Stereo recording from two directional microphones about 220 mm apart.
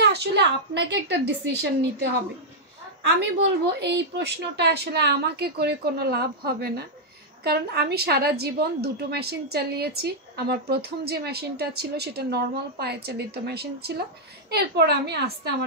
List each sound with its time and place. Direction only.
0.0 s a woman's voice: 50° right (ahead or behind)
3.2 s a woman's voice: 50° right (ahead or behind)